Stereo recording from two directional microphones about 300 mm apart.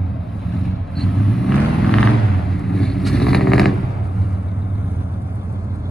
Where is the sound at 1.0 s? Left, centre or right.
Centre.